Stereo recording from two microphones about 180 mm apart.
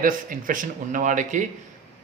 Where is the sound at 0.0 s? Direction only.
50° right (ahead or behind).